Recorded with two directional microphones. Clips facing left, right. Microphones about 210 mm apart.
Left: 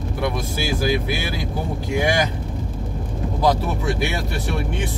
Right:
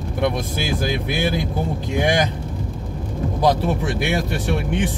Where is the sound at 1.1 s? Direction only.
55° right (ahead or behind).